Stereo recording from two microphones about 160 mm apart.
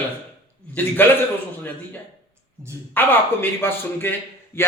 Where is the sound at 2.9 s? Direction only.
15° left (ahead or behind).